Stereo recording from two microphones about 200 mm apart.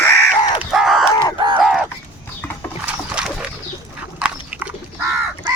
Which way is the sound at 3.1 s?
5° right (ahead or behind).